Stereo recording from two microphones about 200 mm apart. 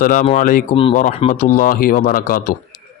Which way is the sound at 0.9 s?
40° left (ahead or behind).